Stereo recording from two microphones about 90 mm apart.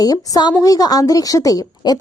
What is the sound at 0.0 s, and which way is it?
A woman's voice, 45° left (ahead or behind).